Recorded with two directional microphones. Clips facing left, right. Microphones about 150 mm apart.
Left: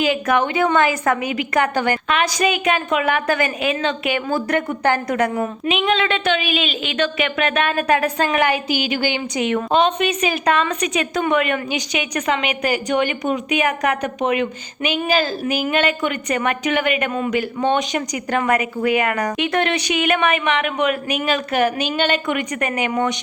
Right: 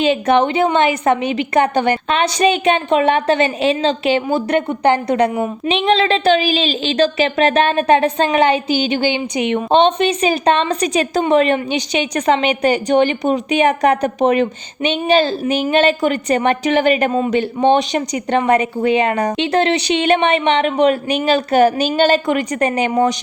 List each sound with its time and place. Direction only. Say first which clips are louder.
0.0 s a woman's voice: right 4 dB; 25° right (ahead or behind)